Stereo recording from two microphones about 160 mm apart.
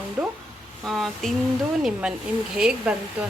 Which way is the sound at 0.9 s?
Centre (ahead or behind).